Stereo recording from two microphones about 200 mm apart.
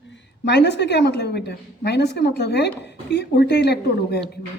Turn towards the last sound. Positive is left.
turn(degrees=55)  # may be behind; listen again after turning